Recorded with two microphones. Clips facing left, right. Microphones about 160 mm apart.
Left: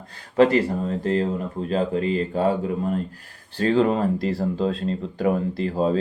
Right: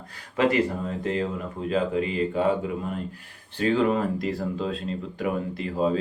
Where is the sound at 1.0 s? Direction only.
35° left (ahead or behind).